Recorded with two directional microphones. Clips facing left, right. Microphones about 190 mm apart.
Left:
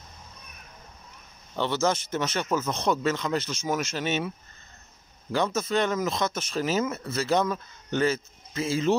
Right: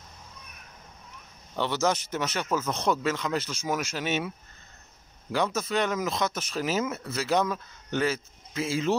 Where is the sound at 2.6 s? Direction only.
15° left (ahead or behind).